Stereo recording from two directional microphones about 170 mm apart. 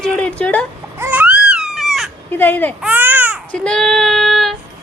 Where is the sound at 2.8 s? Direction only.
10° right (ahead or behind).